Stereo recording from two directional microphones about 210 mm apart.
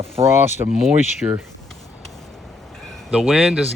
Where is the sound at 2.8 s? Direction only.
Centre (ahead or behind).